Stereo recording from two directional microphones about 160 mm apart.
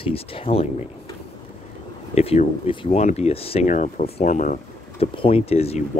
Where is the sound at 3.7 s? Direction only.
50° left (ahead or behind).